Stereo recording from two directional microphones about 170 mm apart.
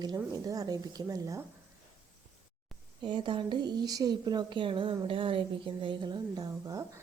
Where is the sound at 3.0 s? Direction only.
30° right (ahead or behind).